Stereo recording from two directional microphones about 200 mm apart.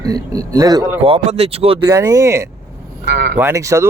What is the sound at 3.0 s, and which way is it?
Speech, 50° right (ahead or behind).